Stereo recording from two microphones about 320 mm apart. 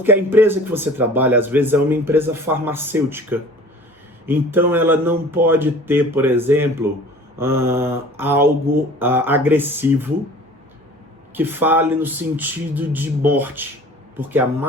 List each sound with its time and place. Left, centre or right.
0.0 s speech: centre
11.3 s speech: centre